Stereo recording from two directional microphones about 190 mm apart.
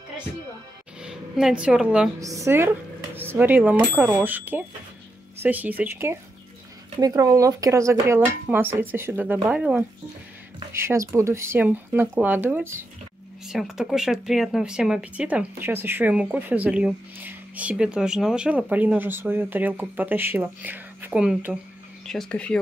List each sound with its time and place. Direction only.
1.0 s a woman's voice: 5° right (ahead or behind)
2.1 s speech: 15° right (ahead or behind); by 22.6 s 5° left (ahead or behind)